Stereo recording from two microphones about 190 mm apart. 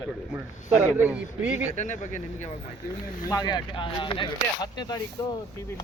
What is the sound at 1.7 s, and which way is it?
Speech, 40° left (ahead or behind).